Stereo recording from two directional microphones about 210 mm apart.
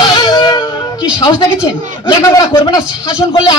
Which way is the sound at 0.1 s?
20° left (ahead or behind).